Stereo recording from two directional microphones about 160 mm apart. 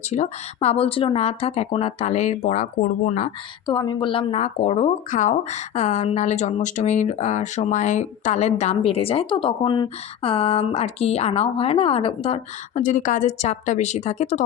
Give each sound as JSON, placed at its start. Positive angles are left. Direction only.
{"t": 0.1, "sound": "speech", "side_deg": 45}
{"t": 3.7, "sound": "speech", "side_deg": 30}